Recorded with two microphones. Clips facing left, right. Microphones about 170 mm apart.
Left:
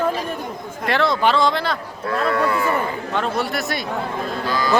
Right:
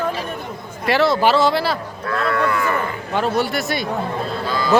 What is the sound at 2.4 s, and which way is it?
Speech, 30° left (ahead or behind).